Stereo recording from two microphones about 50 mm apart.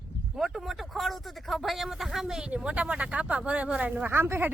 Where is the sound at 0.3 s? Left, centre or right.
Centre.